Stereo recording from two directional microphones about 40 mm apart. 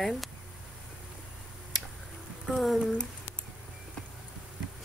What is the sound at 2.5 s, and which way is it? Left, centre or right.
Speech, centre.